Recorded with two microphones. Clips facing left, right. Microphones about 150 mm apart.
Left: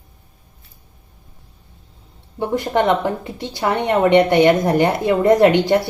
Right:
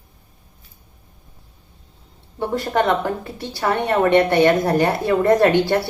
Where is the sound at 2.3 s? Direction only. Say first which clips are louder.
Left 2 dB; 20° left (ahead or behind).